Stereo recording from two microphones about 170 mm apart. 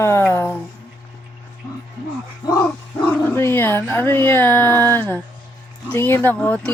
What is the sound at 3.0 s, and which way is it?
Speech, 10° left (ahead or behind).